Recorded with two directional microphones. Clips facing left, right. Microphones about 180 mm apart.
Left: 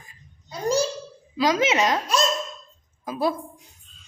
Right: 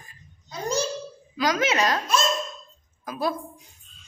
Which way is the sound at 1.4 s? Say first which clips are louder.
Left 2 dB; 25° left (ahead or behind).